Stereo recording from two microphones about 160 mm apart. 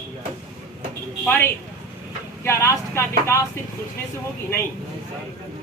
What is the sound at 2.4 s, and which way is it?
A man's voice, 15° left (ahead or behind).